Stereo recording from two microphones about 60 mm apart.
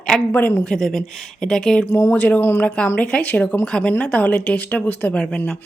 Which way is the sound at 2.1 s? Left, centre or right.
Left.